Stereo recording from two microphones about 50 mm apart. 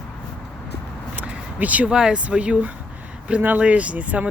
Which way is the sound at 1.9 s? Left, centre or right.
Centre.